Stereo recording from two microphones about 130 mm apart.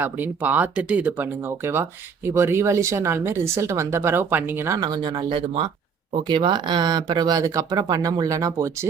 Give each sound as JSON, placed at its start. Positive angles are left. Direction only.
{"t": 0.0, "sound": "speech", "side_deg": -15}